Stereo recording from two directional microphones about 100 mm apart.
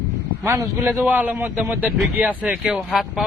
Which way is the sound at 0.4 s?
25° right (ahead or behind).